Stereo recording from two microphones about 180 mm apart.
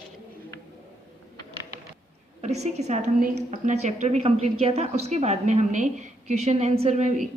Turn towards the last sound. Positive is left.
turn(degrees=-40)  # may be behind; listen again after turning